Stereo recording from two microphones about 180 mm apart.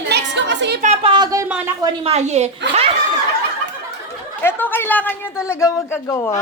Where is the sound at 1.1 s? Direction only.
20° right (ahead or behind).